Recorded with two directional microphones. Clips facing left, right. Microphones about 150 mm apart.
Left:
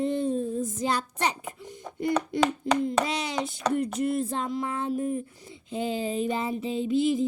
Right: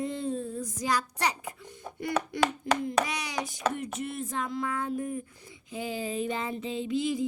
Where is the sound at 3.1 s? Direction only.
25° left (ahead or behind).